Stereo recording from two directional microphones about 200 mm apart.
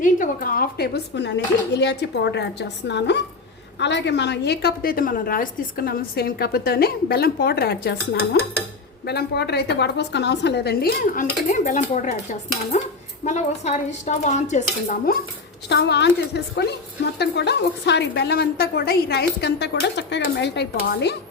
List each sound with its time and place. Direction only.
0.0 s a woman's voice: 45° left (ahead or behind)
15.7 s a woman's voice: 60° left (ahead or behind)